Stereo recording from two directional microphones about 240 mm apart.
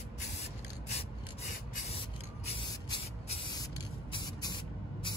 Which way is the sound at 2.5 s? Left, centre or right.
Left.